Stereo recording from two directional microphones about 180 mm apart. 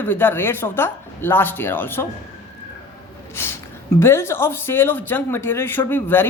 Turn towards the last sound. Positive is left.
turn(degrees=10)  # may be behind; listen again after turning